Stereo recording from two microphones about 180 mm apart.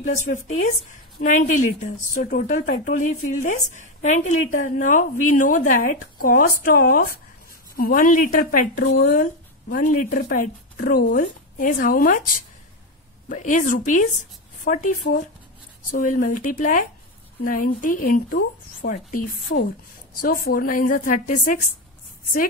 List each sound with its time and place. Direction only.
0.0 s a woman's voice: 40° left (ahead or behind)